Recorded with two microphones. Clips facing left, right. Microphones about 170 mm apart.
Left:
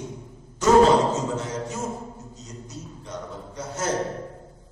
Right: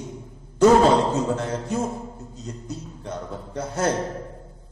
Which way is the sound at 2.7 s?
60° right (ahead or behind).